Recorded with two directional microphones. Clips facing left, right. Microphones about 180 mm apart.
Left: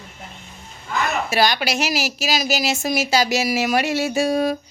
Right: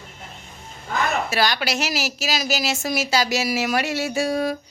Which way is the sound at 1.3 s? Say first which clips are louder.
Left 3 dB; 15° left (ahead or behind).